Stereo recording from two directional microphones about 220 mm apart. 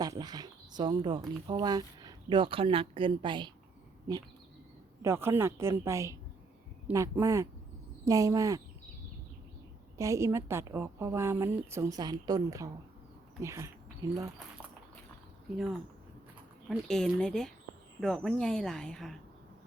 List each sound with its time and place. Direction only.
0.0 s a woman's voice: 15° right (ahead or behind)
10.0 s a woman's voice: 15° right (ahead or behind)
15.5 s speech: centre (ahead or behind)